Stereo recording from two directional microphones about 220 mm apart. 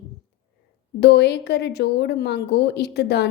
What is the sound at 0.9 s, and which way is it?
A woman's voice, 50° left (ahead or behind).